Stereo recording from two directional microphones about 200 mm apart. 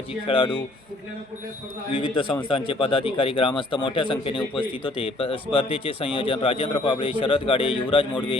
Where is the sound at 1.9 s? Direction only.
25° left (ahead or behind).